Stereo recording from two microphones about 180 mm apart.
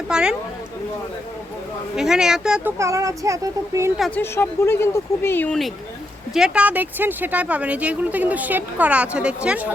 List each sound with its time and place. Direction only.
0.1 s speech: 5° right (ahead or behind)
2.0 s speech: 5° right (ahead or behind)
2.7 s speech: 15° right (ahead or behind)
3.9 s speech: centre (ahead or behind)
4.2 s speech: 15° left (ahead or behind); by 9.7 s 10° right (ahead or behind)